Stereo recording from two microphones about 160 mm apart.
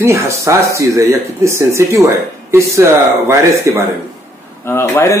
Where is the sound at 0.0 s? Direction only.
20° right (ahead or behind).